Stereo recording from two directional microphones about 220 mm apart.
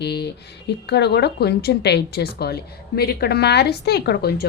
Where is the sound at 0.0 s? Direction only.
50° left (ahead or behind).